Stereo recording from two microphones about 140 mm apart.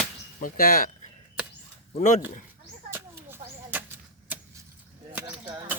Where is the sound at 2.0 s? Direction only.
65° left (ahead or behind).